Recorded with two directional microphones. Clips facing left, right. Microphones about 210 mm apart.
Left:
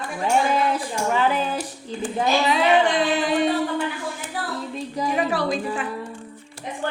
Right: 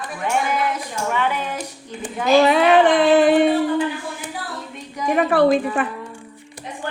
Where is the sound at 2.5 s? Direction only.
55° right (ahead or behind).